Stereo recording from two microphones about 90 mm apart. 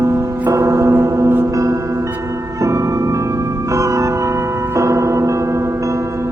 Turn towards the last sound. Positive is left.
turn(degrees=-35)  # may be behind; listen again after turning